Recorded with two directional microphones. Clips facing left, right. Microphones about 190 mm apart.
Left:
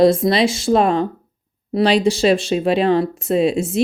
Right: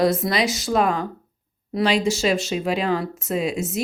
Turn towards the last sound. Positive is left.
turn(degrees=30)  # may be behind; listen again after turning